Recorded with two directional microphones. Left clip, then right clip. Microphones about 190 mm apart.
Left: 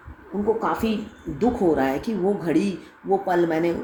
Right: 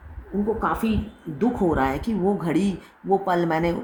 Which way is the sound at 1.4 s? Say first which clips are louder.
Left 1 dB; 40° right (ahead or behind).